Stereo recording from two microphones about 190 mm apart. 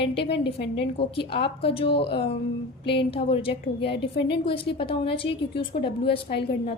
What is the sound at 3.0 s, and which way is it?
Speech, 30° left (ahead or behind).